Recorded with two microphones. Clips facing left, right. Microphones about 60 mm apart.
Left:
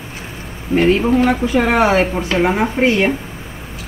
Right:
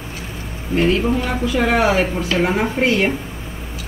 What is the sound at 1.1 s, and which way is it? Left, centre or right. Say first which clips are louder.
Speech: left 6 dB; left.